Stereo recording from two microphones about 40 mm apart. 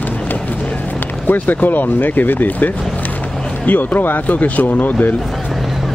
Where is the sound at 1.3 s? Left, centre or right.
Left.